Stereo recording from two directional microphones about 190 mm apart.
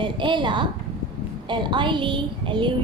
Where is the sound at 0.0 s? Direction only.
25° right (ahead or behind).